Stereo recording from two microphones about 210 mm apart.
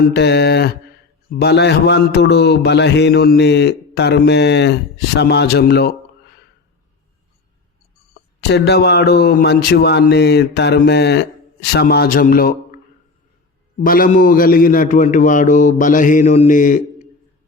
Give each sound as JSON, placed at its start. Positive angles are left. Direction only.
{"t": 0.0, "sound": "mantra", "side_deg": 50}
{"t": 8.4, "sound": "mantra", "side_deg": 50}
{"t": 13.7, "sound": "a man's voice", "side_deg": 45}